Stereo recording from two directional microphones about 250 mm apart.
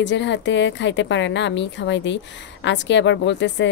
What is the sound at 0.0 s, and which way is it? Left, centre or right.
Speech, left.